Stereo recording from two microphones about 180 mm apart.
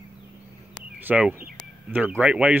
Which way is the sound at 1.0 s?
5° right (ahead or behind).